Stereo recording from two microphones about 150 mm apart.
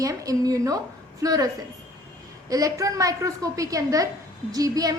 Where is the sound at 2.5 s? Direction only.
25° right (ahead or behind).